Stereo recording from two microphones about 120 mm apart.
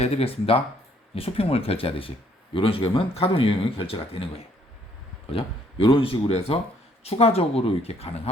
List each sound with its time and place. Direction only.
0.0 s speech: 55° left (ahead or behind)
5.3 s speech: 50° left (ahead or behind)